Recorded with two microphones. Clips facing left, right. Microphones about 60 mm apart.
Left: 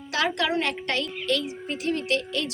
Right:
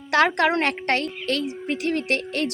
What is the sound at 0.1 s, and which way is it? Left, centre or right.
A woman's voice, right.